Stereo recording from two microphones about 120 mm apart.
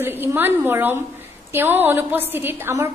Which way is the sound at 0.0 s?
20° right (ahead or behind).